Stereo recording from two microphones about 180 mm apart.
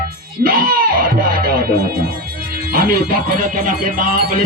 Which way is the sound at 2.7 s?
50° right (ahead or behind).